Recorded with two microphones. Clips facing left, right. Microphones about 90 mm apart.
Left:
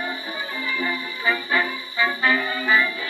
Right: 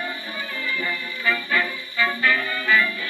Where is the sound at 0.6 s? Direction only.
20° left (ahead or behind).